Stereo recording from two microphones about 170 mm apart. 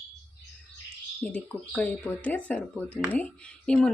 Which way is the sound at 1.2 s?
5° left (ahead or behind).